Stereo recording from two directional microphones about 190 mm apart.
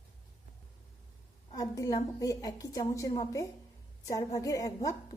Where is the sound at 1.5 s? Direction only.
20° left (ahead or behind).